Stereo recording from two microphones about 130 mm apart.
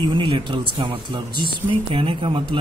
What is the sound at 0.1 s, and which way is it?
Speech, 40° right (ahead or behind).